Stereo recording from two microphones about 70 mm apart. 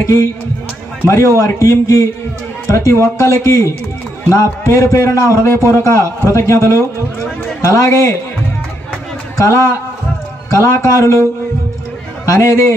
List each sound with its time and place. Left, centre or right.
1.0 s a man's voice: left
5.1 s a man's voice: left
9.4 s a man's voice: left
12.3 s a man's voice: left